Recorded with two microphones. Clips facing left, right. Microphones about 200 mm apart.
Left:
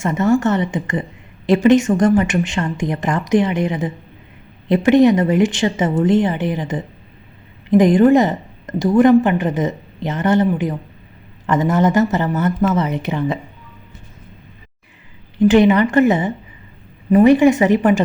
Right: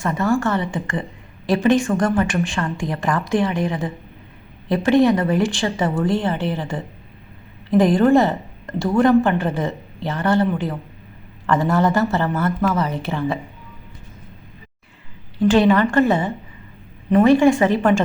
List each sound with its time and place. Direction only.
0.0 s a woman's voice: 20° left (ahead or behind)
15.4 s a woman's voice: 20° left (ahead or behind)